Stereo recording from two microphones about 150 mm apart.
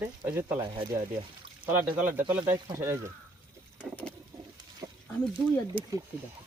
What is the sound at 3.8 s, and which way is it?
Vehicle, 10° left (ahead or behind).